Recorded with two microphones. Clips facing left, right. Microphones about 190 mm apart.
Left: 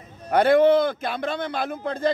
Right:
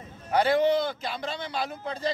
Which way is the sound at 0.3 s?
55° left (ahead or behind).